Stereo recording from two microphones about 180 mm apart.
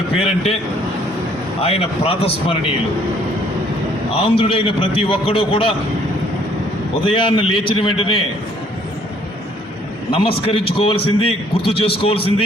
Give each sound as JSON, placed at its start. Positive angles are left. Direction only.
{"t": 1.6, "sound": "a man's voice", "side_deg": 30}
{"t": 4.1, "sound": "a man's voice", "side_deg": 30}
{"t": 7.0, "sound": "a man's voice", "side_deg": 30}
{"t": 10.1, "sound": "a man's voice", "side_deg": 30}